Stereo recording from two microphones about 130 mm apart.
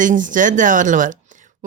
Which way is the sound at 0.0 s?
85° right.